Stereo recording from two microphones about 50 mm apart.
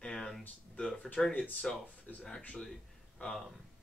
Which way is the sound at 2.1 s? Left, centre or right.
Left.